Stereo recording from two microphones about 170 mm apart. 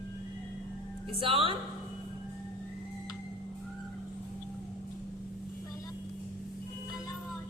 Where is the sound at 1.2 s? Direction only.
30° right (ahead or behind).